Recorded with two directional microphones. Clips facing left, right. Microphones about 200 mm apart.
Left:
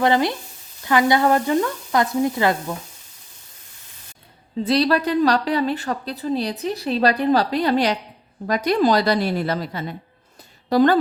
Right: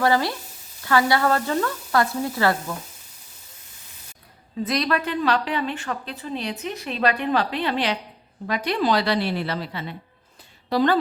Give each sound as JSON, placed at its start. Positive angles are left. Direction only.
{"t": 0.0, "sound": "speech", "side_deg": 20}
{"t": 4.6, "sound": "a woman's voice", "side_deg": 30}